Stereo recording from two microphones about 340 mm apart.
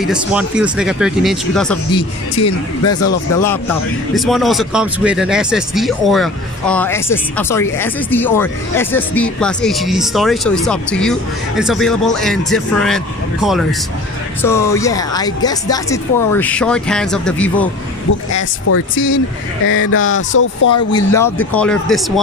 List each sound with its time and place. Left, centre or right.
0.0 s speech: centre
2.8 s speech: left
4.1 s speech: centre
18.3 s speech: left
20.9 s speech: centre